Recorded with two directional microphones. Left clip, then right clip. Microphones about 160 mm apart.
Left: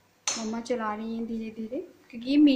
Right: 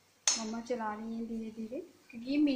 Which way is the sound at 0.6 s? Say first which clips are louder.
Left 9 dB; 15° left (ahead or behind).